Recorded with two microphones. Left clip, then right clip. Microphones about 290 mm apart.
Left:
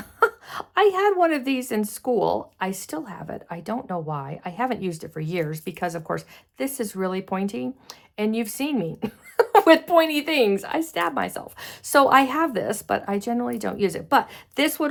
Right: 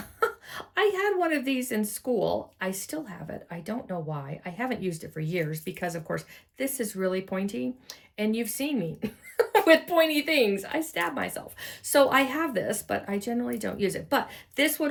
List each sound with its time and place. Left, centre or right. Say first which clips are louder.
0.2 s a woman's voice: left 7 dB; centre